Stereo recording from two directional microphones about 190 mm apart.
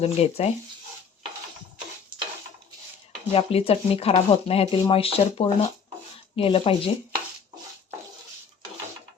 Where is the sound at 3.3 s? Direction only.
30° left (ahead or behind).